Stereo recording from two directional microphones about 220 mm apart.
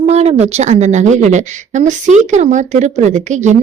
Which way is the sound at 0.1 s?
30° right (ahead or behind).